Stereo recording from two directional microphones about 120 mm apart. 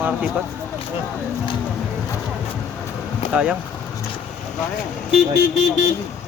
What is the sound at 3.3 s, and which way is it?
Speech, 10° right (ahead or behind).